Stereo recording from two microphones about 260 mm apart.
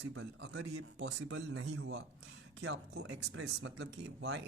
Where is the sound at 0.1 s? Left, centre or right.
Right.